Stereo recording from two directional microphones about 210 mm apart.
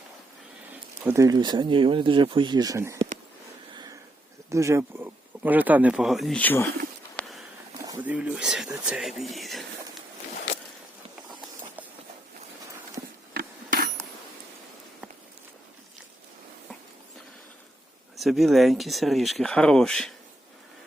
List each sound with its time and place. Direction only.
0.7 s speech: 10° right (ahead or behind)
4.4 s speech: 15° right (ahead or behind); by 6.7 s 10° left (ahead or behind)
7.2 s a sound: centre (ahead or behind)
7.9 s speech: 5° right (ahead or behind)
13.3 s a sound: 40° right (ahead or behind)
18.2 s speech: centre (ahead or behind)